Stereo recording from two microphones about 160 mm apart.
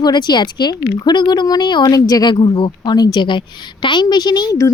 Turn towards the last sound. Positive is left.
turn(degrees=25)  # may be behind; listen again after turning